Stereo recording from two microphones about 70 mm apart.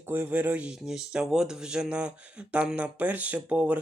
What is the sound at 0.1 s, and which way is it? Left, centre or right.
Speech, right.